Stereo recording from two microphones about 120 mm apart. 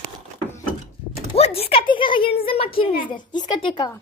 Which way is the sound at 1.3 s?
55° left (ahead or behind).